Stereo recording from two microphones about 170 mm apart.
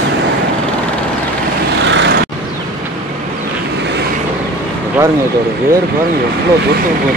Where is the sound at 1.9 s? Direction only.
90° right.